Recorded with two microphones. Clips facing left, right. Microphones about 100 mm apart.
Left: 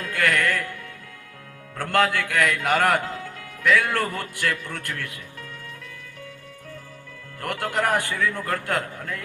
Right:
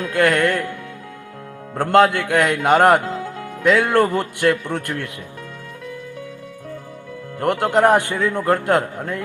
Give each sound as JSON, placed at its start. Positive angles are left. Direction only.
{"t": 0.0, "sound": "music", "side_deg": -20}
{"t": 1.7, "sound": "a man's voice", "side_deg": -20}
{"t": 7.3, "sound": "a man's voice", "side_deg": -25}